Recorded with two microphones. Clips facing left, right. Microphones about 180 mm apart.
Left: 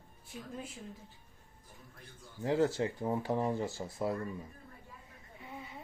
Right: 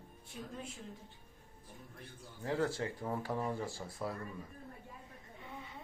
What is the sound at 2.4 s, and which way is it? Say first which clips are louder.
Speech: left 5 dB; 25° left (ahead or behind).